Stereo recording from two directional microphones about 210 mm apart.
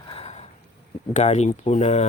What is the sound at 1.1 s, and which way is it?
Speech, 30° left (ahead or behind).